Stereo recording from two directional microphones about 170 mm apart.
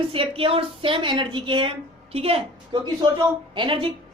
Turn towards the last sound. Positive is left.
turn(degrees=-30)  # may be behind; listen again after turning